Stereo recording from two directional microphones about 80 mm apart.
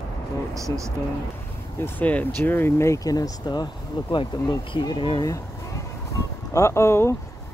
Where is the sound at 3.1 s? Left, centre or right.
Left.